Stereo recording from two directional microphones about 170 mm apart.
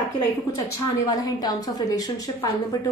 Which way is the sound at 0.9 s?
20° left (ahead or behind).